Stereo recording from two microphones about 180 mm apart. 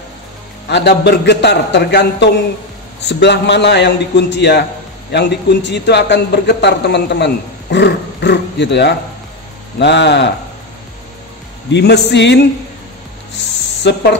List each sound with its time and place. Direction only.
0.7 s a man's voice: 70° left (ahead or behind)
11.7 s a man's voice: 70° left (ahead or behind)
13.9 s a man's voice: 70° left (ahead or behind)